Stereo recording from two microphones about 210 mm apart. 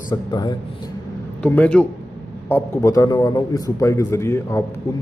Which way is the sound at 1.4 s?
5° left (ahead or behind).